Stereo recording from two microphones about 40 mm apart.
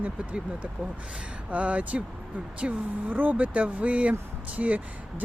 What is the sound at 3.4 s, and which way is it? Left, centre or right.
Speech, right.